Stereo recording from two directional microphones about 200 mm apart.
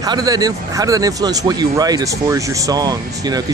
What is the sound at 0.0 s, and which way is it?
Speech, 20° right (ahead or behind).